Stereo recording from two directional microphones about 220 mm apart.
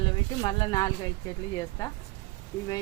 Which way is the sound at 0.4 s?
15° left (ahead or behind).